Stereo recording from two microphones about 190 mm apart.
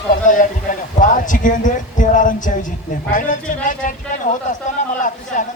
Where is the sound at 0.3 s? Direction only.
45° left (ahead or behind).